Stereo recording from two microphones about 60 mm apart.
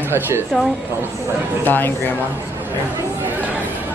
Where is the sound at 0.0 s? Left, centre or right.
Right.